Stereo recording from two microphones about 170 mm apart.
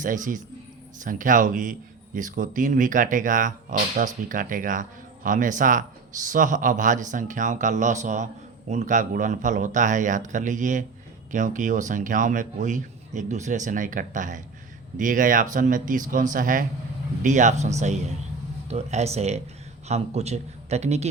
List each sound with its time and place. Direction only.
0.0 s a man's voice: 50° right (ahead or behind)